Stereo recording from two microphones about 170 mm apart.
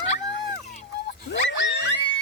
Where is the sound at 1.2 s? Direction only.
85° left.